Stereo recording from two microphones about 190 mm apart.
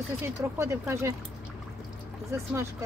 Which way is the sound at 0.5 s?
15° right (ahead or behind).